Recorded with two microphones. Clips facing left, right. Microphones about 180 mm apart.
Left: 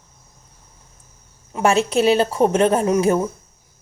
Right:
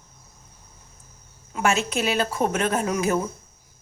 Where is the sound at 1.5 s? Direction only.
35° left (ahead or behind).